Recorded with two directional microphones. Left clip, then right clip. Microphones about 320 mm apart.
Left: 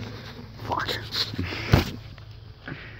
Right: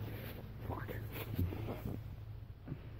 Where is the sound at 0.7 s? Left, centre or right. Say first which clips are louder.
Left 19 dB; centre.